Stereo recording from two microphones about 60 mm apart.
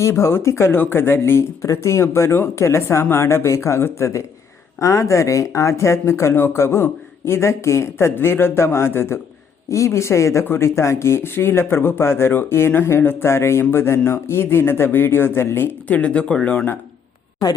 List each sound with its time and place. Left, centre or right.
0.0 s speech: left
1.6 s speech: left
15.9 s speech: left